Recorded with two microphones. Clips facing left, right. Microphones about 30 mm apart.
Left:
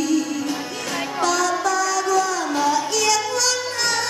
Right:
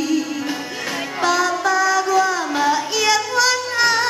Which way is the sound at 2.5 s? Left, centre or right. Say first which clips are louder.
Even; centre.